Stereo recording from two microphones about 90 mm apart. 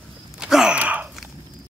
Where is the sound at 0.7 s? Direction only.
15° right (ahead or behind).